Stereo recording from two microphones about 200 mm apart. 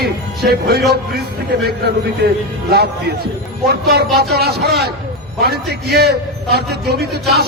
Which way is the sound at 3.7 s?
55° right (ahead or behind).